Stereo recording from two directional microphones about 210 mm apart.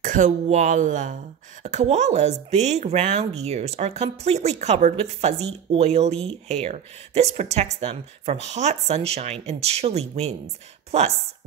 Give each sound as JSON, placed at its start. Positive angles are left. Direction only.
{"t": 0.0, "sound": "speech", "side_deg": -35}